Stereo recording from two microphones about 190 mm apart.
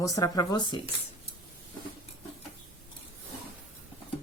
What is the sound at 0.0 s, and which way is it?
Speech, 20° left (ahead or behind).